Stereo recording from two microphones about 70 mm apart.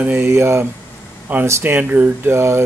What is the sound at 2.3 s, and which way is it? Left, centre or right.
Speech, right.